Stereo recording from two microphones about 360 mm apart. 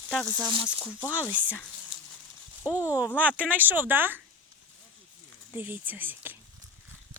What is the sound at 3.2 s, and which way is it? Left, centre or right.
Speech, centre.